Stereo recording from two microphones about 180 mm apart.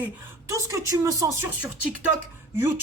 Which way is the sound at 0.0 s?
15° right (ahead or behind).